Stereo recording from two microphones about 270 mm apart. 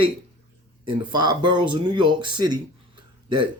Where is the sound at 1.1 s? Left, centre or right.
Centre.